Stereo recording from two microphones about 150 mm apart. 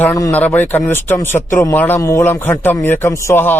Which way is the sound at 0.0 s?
20° left (ahead or behind).